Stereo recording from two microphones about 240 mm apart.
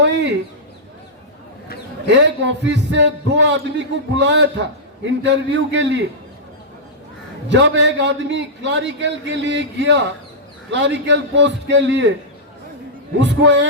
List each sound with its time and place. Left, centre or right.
0.0 s a sound: right
2.0 s a man's voice: right
7.5 s a man's voice: right
13.1 s a man's voice: right